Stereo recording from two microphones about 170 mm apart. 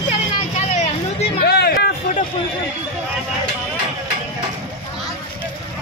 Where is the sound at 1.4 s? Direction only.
70° left (ahead or behind).